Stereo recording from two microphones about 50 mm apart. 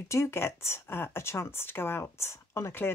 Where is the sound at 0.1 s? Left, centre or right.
Left.